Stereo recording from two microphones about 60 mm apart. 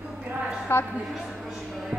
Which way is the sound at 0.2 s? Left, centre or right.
Centre.